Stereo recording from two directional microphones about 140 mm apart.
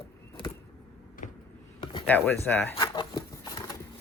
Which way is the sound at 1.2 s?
60° left (ahead or behind).